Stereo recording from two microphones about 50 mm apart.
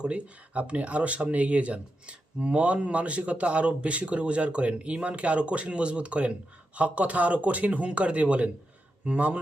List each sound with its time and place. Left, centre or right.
0.0 s speech: right